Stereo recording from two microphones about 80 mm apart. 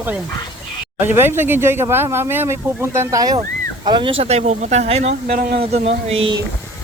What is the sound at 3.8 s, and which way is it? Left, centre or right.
Speech, right.